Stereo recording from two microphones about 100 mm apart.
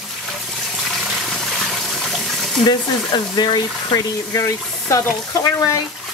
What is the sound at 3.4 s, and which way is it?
Speech, 45° left (ahead or behind).